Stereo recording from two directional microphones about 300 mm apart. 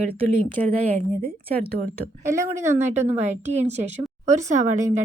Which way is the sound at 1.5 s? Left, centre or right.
Right.